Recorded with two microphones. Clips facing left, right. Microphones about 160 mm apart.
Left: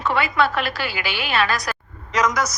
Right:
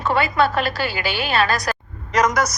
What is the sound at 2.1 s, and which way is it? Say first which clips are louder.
Speech: right 2 dB; 60° right (ahead or behind).